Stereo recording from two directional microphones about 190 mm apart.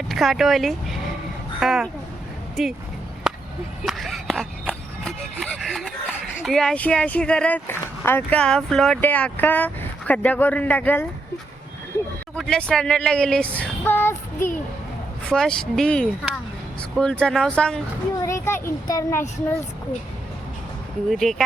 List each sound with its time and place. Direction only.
0.1 s speech: centre (ahead or behind)
3.8 s a sound: centre (ahead or behind)
6.4 s speech: centre (ahead or behind)
12.4 s speech: 5° left (ahead or behind)
18.2 s speech: 15° left (ahead or behind)
21.1 s speech: centre (ahead or behind)